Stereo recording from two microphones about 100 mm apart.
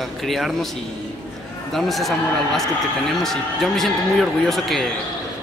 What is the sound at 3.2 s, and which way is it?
Speech, 5° left (ahead or behind).